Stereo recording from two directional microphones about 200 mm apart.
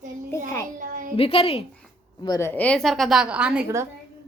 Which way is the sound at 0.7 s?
45° right (ahead or behind).